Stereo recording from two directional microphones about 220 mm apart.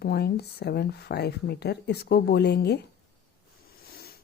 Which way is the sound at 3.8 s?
45° left (ahead or behind).